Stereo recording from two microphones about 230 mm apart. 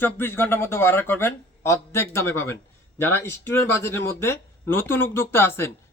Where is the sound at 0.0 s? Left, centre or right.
Centre.